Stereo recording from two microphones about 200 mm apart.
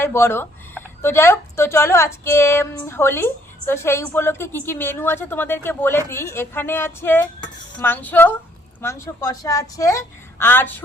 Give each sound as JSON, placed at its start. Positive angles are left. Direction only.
{"t": 0.0, "sound": "speech", "side_deg": 10}